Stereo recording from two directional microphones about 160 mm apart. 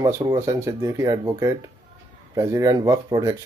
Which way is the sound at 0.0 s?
20° right (ahead or behind).